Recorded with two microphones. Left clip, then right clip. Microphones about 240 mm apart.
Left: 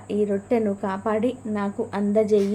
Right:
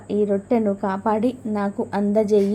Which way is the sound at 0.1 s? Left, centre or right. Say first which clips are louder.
Right 2 dB; centre.